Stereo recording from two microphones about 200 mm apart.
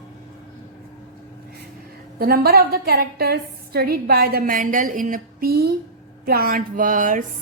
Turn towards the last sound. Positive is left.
turn(degrees=-40)  # may be behind; listen again after turning